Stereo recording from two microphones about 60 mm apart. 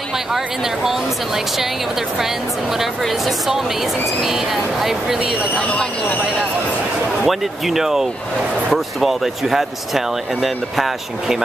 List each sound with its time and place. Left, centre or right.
0.8 s speech: centre
2.8 s speech: centre
5.6 s speech: left
7.2 s speech: centre